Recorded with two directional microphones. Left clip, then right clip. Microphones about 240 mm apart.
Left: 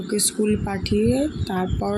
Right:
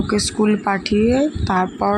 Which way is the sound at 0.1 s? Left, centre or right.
Centre.